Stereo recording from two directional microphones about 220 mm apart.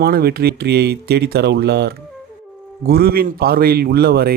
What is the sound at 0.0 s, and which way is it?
Speech, 45° right (ahead or behind).